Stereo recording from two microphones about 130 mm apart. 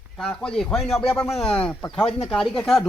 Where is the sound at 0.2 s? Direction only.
5° left (ahead or behind).